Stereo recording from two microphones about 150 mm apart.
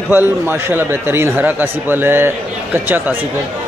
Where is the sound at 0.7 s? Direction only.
15° right (ahead or behind).